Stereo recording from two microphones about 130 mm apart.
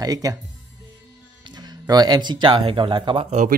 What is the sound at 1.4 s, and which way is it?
Speech, 30° right (ahead or behind).